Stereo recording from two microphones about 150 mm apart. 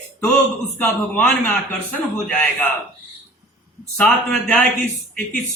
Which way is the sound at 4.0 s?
10° left (ahead or behind).